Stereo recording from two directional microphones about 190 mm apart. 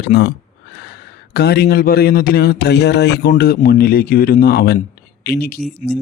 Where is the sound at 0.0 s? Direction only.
60° left (ahead or behind).